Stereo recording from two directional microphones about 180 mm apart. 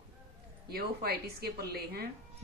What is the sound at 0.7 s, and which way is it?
Speech, 60° right (ahead or behind).